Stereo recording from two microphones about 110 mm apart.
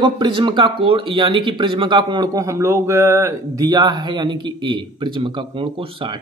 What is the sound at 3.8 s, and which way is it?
Speech, 45° right (ahead or behind).